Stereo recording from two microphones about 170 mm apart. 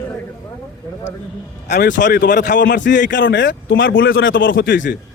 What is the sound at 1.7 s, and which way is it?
Speech, 85° left.